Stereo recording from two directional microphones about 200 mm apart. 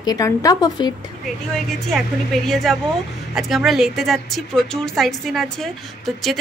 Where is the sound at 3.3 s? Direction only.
Centre (ahead or behind).